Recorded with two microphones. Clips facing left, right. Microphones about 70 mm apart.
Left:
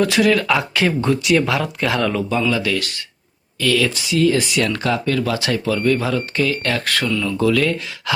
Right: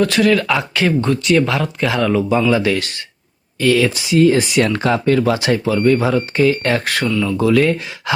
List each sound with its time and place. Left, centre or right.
0.0 s speech: centre
2.5 s speech: right